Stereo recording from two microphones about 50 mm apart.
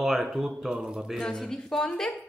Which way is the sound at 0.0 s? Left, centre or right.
Centre.